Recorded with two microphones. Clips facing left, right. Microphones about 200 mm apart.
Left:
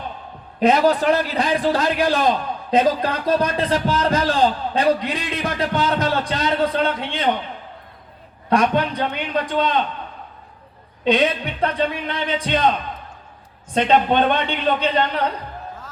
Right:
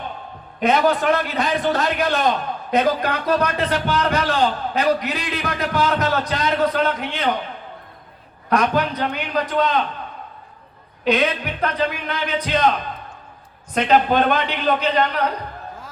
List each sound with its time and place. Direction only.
0.6 s a man's voice: 35° left (ahead or behind)
8.4 s a man's voice: 30° left (ahead or behind)
11.0 s a man's voice: 30° left (ahead or behind)
13.7 s a man's voice: 25° left (ahead or behind)